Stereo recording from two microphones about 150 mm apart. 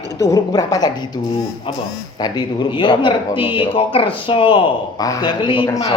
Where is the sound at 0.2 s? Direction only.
25° left (ahead or behind).